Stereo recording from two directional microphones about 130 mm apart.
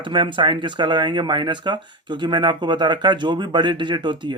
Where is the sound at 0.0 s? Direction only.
40° right (ahead or behind).